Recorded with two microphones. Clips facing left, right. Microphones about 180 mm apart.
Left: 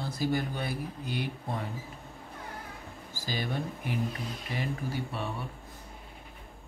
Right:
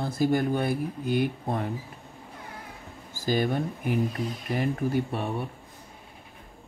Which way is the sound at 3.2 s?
50° right (ahead or behind).